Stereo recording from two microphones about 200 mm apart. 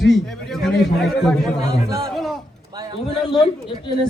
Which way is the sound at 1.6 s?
15° right (ahead or behind).